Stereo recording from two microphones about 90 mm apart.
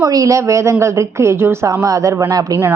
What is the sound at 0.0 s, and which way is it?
A woman's voice, 40° right (ahead or behind).